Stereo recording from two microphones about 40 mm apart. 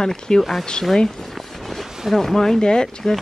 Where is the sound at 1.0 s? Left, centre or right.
Centre.